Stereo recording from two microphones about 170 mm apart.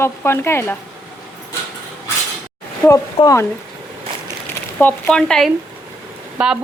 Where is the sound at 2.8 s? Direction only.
15° left (ahead or behind).